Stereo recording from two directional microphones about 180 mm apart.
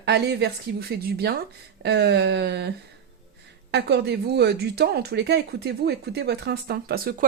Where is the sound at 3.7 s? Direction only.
65° right (ahead or behind).